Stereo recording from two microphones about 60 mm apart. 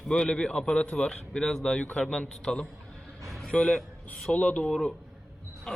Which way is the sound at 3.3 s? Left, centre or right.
Centre.